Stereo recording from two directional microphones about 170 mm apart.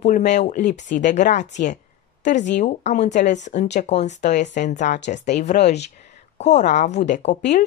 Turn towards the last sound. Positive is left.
turn(degrees=45)  # may be behind; listen again after turning